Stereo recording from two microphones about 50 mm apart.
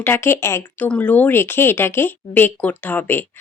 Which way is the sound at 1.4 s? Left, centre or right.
Left.